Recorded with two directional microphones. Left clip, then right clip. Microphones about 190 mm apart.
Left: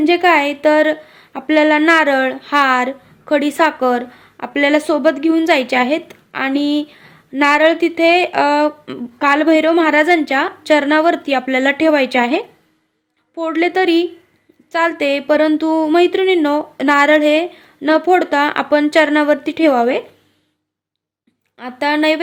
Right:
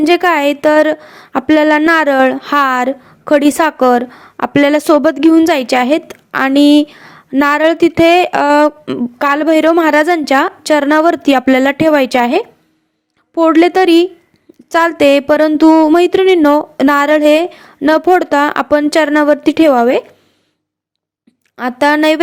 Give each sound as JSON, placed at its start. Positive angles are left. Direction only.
{"t": 0.0, "sound": "a woman's voice", "side_deg": -45}
{"t": 21.6, "sound": "a woman's voice", "side_deg": -45}